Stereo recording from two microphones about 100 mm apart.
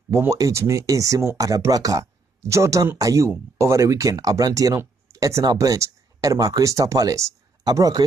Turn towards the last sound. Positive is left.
turn(degrees=-40)  # may be behind; listen again after turning